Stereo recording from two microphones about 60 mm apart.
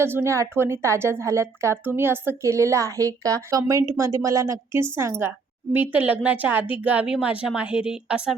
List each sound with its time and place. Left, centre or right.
0.0 s a woman's voice: right
1.8 s speech: right
2.4 s a woman's voice: right
4.7 s a woman's voice: right
5.7 s a woman's voice: right; by 8.4 s centre